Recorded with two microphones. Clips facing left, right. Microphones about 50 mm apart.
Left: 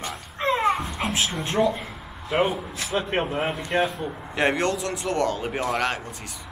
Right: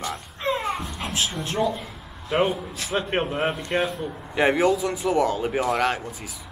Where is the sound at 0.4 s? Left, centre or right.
Left.